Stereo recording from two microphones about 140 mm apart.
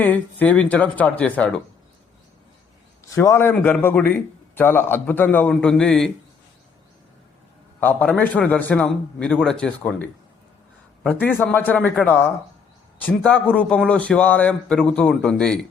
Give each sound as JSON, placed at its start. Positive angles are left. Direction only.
{"t": 0.0, "sound": "a man's voice", "side_deg": 10}
{"t": 3.0, "sound": "a man's voice", "side_deg": 20}
{"t": 7.8, "sound": "a man's voice", "side_deg": 10}